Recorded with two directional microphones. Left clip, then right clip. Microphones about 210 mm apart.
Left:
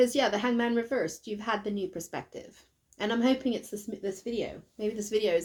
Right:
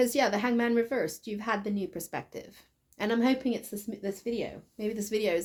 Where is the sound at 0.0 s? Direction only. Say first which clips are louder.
Left 1 dB; 35° right (ahead or behind).